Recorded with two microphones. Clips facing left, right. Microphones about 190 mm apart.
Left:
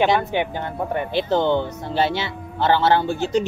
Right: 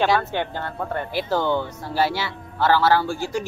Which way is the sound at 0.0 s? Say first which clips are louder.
Left 2 dB; 15° left (ahead or behind).